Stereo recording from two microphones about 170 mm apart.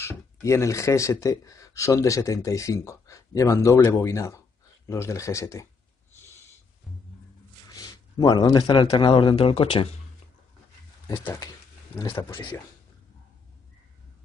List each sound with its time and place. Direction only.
0.0 s speech: 15° left (ahead or behind)
7.7 s speech: 25° left (ahead or behind)
11.1 s speech: 15° left (ahead or behind)